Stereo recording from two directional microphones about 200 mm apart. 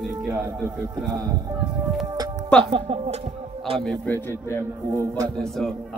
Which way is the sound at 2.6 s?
30° right (ahead or behind).